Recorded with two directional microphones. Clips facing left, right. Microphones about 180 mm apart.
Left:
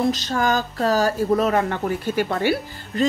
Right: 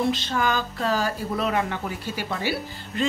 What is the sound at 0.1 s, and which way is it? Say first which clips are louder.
A woman's voice: left 3 dB; 40° left (ahead or behind).